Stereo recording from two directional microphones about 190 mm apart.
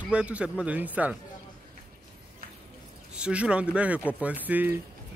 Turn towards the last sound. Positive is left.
turn(degrees=-10)  # may be behind; listen again after turning